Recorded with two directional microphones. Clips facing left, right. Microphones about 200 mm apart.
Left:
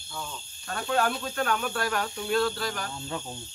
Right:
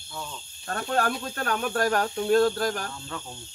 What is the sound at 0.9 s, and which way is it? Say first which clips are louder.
Speech: left 1 dB; 40° right (ahead or behind).